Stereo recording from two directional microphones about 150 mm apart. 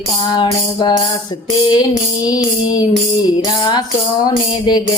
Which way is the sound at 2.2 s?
25° left (ahead or behind).